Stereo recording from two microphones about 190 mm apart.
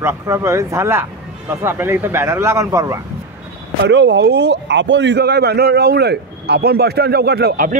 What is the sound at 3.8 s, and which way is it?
A man's voice, 65° right (ahead or behind).